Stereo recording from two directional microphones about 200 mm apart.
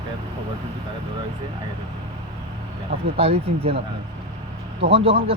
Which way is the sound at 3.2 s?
30° right (ahead or behind).